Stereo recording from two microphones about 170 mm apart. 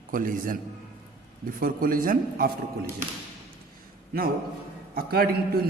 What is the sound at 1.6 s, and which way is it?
Speech, 55° right (ahead or behind).